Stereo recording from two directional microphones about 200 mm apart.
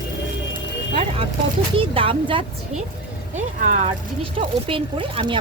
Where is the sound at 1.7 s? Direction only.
25° right (ahead or behind).